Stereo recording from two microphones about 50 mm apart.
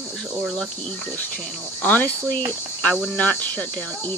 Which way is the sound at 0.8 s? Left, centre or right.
Left.